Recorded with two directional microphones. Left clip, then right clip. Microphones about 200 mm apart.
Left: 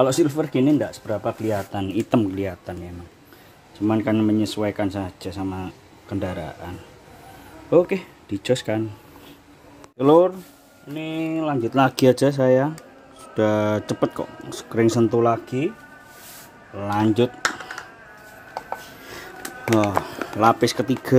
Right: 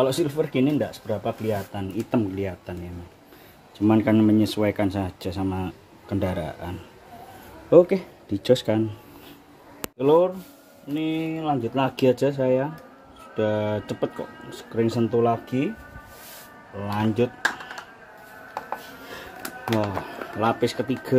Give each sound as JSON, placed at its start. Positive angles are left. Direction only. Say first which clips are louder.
{"t": 0.0, "sound": "speech", "louder": "left 3 dB", "side_deg": 35}
{"t": 3.8, "sound": "speech", "louder": "right 1 dB", "side_deg": 0}
{"t": 7.7, "sound": "speech", "louder": "right 2 dB", "side_deg": 5}
{"t": 9.9, "sound": "speech", "louder": "left 3 dB", "side_deg": 40}
{"t": 11.0, "sound": "speech", "louder": "left 2 dB", "side_deg": 25}
{"t": 11.7, "sound": "speech", "louder": "left 6 dB", "side_deg": 45}
{"t": 16.8, "sound": "speech", "louder": "left 4 dB", "side_deg": 40}
{"t": 20.3, "sound": "speech", "louder": "left 6 dB", "side_deg": 35}